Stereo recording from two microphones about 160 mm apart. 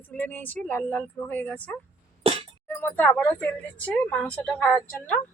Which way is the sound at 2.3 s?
35° right (ahead or behind).